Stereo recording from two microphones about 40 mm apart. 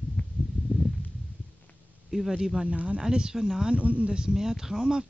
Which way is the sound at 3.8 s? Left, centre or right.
Right.